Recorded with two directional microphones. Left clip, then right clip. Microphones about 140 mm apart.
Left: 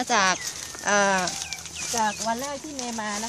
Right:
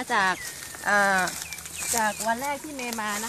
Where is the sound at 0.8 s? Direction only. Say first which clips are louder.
Even; 50° left (ahead or behind).